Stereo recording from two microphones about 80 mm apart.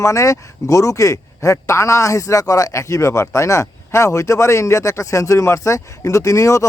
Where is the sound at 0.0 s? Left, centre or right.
Left.